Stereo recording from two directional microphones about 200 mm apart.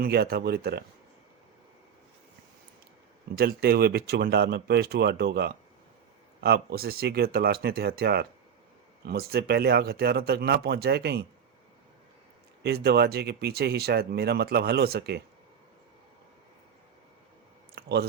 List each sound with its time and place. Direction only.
0.0 s speech: 50° right (ahead or behind)
3.3 s speech: 50° right (ahead or behind)
12.6 s speech: 55° right (ahead or behind)
17.7 s a sound: 55° right (ahead or behind)